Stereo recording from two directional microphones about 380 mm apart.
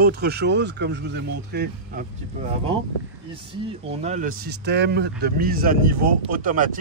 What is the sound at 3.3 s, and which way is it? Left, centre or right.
Speech, centre.